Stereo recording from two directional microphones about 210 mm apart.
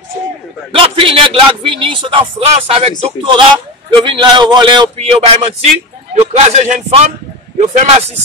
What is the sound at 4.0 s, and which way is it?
Speech, 20° right (ahead or behind).